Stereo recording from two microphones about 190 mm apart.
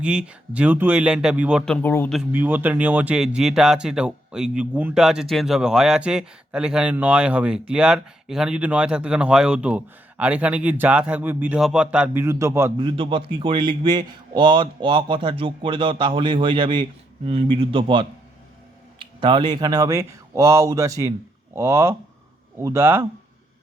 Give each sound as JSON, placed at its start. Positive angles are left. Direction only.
{"t": 0.0, "sound": "speech", "side_deg": -5}
{"t": 2.1, "sound": "speech", "side_deg": -10}
{"t": 12.7, "sound": "a man's voice", "side_deg": -25}